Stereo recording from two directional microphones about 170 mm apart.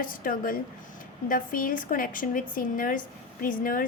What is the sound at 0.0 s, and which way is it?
A woman's voice, 55° left (ahead or behind).